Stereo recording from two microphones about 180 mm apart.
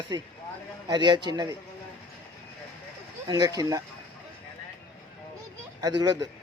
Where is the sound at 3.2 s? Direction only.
20° right (ahead or behind).